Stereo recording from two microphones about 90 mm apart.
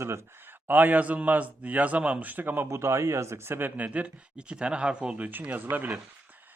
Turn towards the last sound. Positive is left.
turn(degrees=-20)  # may be behind; listen again after turning